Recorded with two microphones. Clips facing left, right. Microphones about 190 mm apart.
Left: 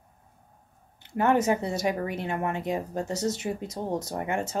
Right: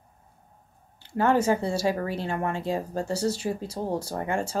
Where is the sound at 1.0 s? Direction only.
20° left (ahead or behind).